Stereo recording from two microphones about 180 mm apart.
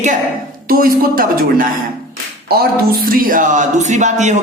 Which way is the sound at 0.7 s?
55° right (ahead or behind).